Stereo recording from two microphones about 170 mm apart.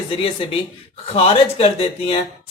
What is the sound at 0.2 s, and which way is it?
Speech, 30° left (ahead or behind).